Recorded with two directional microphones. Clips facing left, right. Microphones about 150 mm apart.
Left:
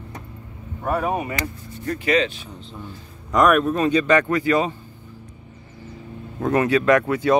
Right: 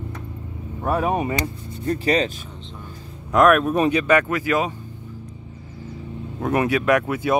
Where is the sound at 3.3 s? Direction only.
Centre (ahead or behind).